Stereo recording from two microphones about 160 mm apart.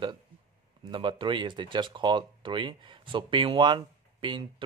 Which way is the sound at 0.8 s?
30° right (ahead or behind).